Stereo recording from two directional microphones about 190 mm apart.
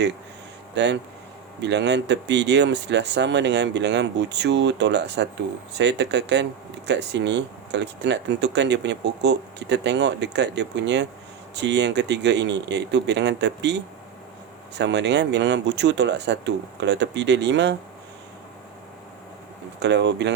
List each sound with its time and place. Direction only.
0.8 s speech: 65° right (ahead or behind)
19.8 s speech: 65° right (ahead or behind)